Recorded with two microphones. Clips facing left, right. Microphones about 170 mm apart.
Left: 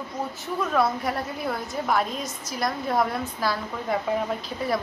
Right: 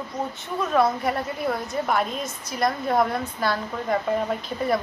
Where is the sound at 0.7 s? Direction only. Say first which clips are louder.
Right 3 dB; centre (ahead or behind).